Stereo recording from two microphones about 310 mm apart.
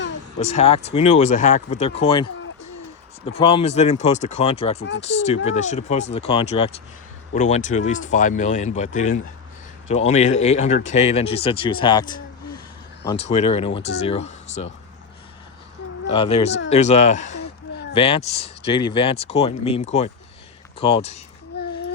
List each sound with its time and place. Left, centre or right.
0.3 s speech: left
3.2 s speech: centre
10.1 s speech: left
13.3 s speech: centre
16.1 s speech: centre
16.6 s a sound: left
17.9 s speech: centre
21.5 s a sound: left